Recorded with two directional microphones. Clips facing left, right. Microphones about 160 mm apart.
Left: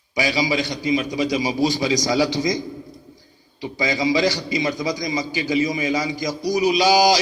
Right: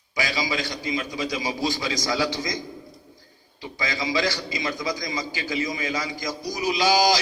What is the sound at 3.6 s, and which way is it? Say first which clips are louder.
A man's voice: left 7 dB; 20° left (ahead or behind).